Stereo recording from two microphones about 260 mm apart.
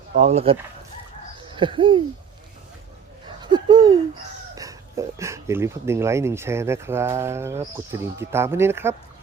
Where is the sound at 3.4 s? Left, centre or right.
Centre.